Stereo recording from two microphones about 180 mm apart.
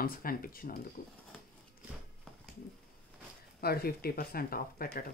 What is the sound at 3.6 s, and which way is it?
Speech, 60° left (ahead or behind).